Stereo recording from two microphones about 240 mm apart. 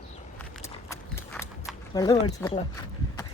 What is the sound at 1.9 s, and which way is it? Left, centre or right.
Speech, centre.